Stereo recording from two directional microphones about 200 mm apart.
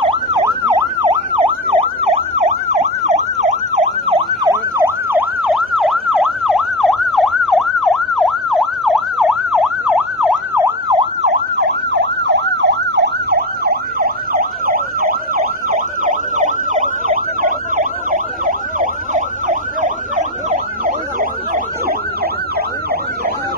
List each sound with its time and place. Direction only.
0.0 s emergency vehicle: 25° right (ahead or behind)
1.0 s emergency vehicle: 30° right (ahead or behind)
4.5 s emergency vehicle: 15° right (ahead or behind)
5.4 s emergency vehicle: centre (ahead or behind)
11.5 s emergency vehicle: 55° right (ahead or behind)